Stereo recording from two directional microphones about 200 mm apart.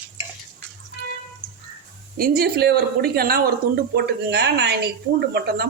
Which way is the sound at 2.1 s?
50° right (ahead or behind).